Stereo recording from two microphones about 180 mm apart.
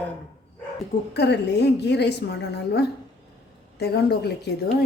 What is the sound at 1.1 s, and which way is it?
A woman's voice, 70° left (ahead or behind).